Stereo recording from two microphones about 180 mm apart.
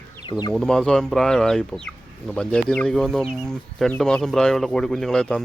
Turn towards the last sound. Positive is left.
turn(degrees=5)  # may be behind; listen again after turning